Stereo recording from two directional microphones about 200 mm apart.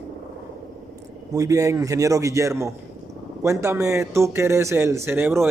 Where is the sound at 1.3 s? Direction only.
15° right (ahead or behind).